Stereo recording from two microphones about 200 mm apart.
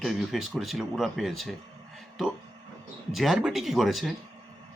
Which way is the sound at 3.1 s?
Centre (ahead or behind).